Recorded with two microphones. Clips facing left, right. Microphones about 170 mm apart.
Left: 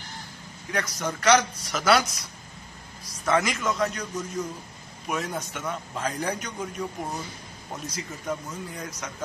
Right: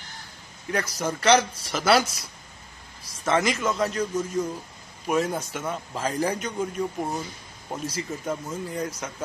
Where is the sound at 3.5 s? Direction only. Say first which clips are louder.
Right 2 dB; 30° right (ahead or behind).